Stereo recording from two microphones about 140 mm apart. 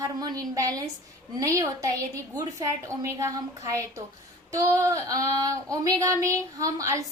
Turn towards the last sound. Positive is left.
turn(degrees=-25)  # may be behind; listen again after turning